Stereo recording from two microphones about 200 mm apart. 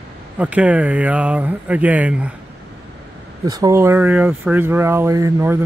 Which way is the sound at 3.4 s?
20° right (ahead or behind).